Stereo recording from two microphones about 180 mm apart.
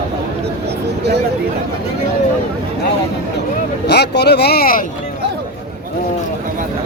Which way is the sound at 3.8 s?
65° left (ahead or behind).